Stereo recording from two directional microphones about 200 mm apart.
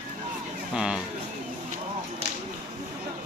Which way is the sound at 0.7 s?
5° right (ahead or behind).